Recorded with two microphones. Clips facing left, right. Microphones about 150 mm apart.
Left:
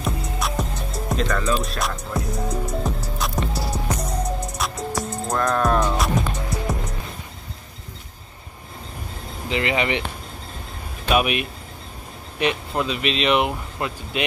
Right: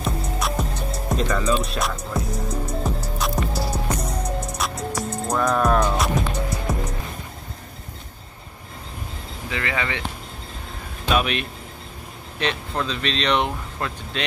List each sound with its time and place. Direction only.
0.0 s music: centre (ahead or behind)
9.5 s speech: 20° left (ahead or behind)
11.1 s speech: 10° left (ahead or behind)